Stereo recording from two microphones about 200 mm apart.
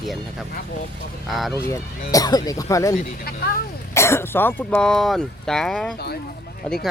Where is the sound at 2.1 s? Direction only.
20° left (ahead or behind).